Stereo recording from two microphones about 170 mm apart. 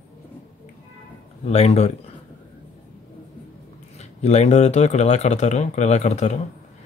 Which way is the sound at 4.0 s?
40° left (ahead or behind).